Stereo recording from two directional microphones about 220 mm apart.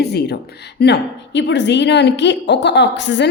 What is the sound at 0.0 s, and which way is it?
A woman's voice, 50° left (ahead or behind).